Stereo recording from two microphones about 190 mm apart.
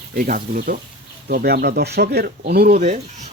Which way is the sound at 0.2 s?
45° right (ahead or behind).